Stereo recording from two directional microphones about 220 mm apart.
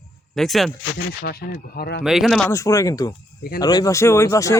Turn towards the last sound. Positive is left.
turn(degrees=15)  # may be behind; listen again after turning